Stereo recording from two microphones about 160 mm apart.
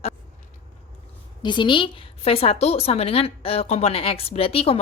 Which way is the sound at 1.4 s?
30° left (ahead or behind).